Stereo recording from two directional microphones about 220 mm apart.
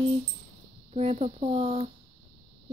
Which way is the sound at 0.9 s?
30° right (ahead or behind).